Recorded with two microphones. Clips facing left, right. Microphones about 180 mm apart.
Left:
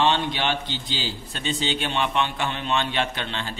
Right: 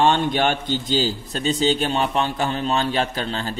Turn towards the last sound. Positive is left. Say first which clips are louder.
# right 5 dB
turn(degrees=-40)  # may be behind; listen again after turning